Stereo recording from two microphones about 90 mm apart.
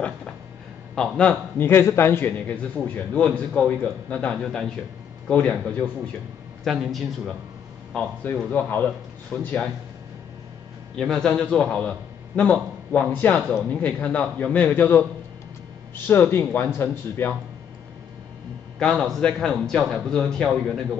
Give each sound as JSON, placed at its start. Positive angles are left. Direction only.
{"t": 0.9, "sound": "a man's voice", "side_deg": 10}
{"t": 1.6, "sound": "a man's voice", "side_deg": 25}
{"t": 2.3, "sound": "a man's voice", "side_deg": 15}
{"t": 6.6, "sound": "a woman's voice", "side_deg": 0}
{"t": 8.5, "sound": "a man's voice", "side_deg": 20}
{"t": 11.0, "sound": "a man's voice", "side_deg": 5}
{"t": 18.8, "sound": "a man's voice", "side_deg": 5}